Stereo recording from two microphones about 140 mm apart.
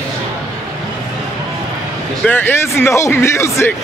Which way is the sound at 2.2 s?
15° left (ahead or behind).